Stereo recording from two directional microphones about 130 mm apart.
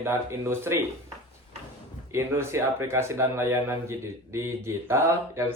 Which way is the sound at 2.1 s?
20° right (ahead or behind).